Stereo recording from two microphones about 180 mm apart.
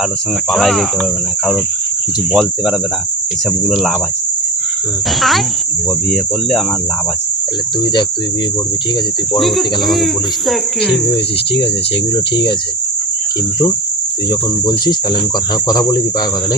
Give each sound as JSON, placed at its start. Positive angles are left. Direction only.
{"t": 0.5, "sound": "speech", "side_deg": 0}
{"t": 2.3, "sound": "speech", "side_deg": -5}
{"t": 9.4, "sound": "speech", "side_deg": 0}
{"t": 12.1, "sound": "speech", "side_deg": 25}
{"t": 15.6, "sound": "speech", "side_deg": 20}